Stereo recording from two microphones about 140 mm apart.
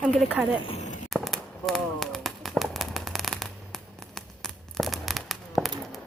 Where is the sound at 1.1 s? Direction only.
Centre (ahead or behind).